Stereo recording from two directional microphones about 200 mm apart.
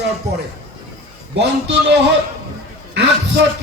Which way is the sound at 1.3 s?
60° right (ahead or behind).